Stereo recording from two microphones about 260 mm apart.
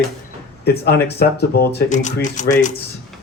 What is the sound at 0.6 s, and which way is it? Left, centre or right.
Speech, left.